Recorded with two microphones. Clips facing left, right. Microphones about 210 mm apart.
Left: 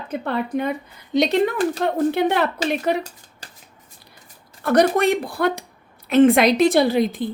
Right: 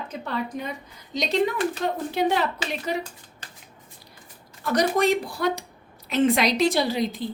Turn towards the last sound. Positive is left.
turn(degrees=55)  # may be behind; listen again after turning